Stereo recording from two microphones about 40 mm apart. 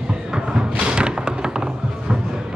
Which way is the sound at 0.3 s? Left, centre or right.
Right.